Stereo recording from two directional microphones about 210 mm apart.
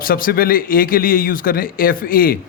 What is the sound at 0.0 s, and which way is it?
A man's voice, 45° left (ahead or behind).